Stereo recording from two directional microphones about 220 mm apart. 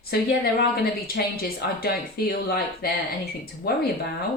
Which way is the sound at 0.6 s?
45° left (ahead or behind).